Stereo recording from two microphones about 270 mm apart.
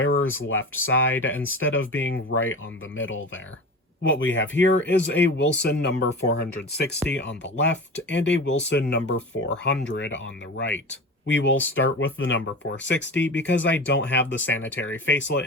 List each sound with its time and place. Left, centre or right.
0.0 s speech: left
11.3 s speech: left